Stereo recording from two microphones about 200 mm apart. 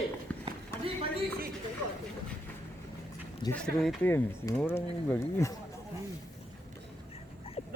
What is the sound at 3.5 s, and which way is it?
Speech, 5° left (ahead or behind).